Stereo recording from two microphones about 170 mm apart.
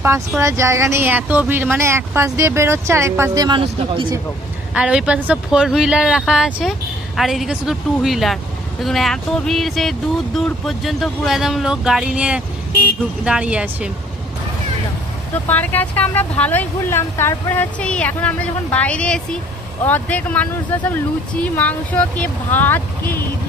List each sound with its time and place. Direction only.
0.0 s speech: 15° right (ahead or behind)
4.7 s speech: 5° right (ahead or behind)
15.4 s speech: 10° left (ahead or behind)